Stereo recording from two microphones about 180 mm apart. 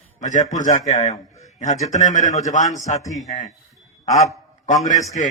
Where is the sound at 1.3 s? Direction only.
40° left (ahead or behind).